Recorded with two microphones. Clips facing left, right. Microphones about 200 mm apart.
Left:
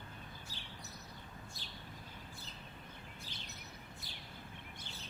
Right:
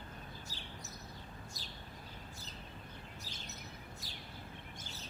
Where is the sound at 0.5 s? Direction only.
40° right (ahead or behind).